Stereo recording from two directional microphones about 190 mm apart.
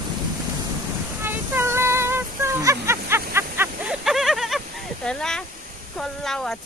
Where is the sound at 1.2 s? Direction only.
10° right (ahead or behind).